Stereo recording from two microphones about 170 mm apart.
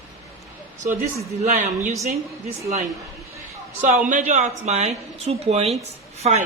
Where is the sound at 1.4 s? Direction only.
45° right (ahead or behind).